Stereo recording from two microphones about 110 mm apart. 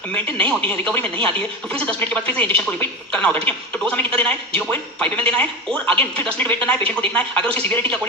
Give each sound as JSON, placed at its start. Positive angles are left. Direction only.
{"t": 0.1, "sound": "a man's voice", "side_deg": 15}